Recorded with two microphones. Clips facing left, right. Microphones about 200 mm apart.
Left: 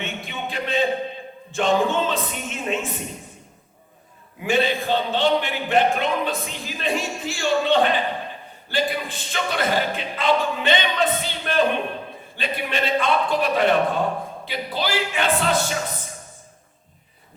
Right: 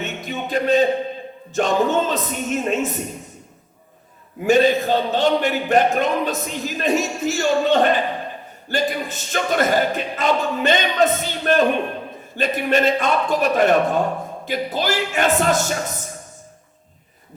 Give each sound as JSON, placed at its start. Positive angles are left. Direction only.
{"t": 0.0, "sound": "speech", "side_deg": -40}
{"t": 4.4, "sound": "speech", "side_deg": -40}